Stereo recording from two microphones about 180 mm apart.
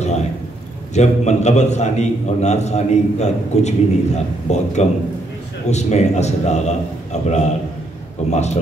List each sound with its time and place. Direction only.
0.9 s a man's voice: 40° left (ahead or behind)